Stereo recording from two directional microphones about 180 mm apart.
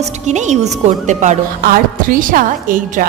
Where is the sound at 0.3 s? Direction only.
40° right (ahead or behind).